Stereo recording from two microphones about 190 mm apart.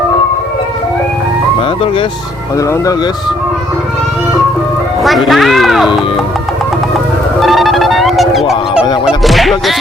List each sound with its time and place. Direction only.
5.0 s speech: centre (ahead or behind)
7.3 s fowl: centre (ahead or behind)
9.2 s music: centre (ahead or behind)